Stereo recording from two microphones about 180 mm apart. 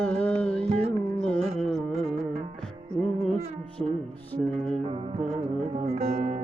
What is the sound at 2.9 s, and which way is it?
Music, centre (ahead or behind).